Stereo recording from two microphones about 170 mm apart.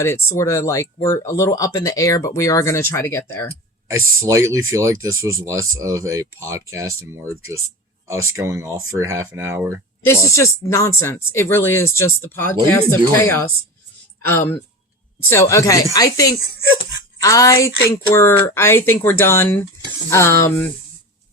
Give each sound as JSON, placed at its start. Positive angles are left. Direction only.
{"t": 0.3, "sound": "speech", "side_deg": 15}
{"t": 3.8, "sound": "speech", "side_deg": -20}
{"t": 10.1, "sound": "speech", "side_deg": 15}